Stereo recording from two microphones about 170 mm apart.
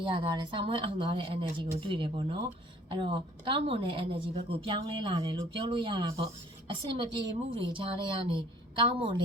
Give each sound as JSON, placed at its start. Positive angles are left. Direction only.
{"t": 0.0, "sound": "a woman's voice", "side_deg": -30}